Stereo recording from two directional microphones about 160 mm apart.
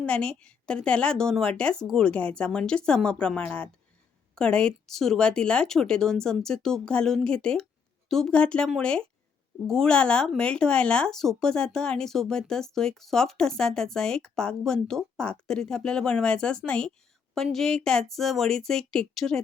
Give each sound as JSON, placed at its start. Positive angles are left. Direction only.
{"t": 0.0, "sound": "speech", "side_deg": 5}